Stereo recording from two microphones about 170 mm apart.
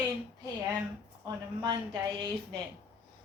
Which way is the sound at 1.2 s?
25° right (ahead or behind).